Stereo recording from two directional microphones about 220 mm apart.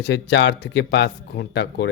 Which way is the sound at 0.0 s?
55° left (ahead or behind).